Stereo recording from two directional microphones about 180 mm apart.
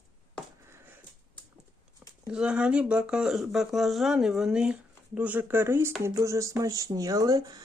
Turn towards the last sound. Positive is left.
turn(degrees=-20)  # may be behind; listen again after turning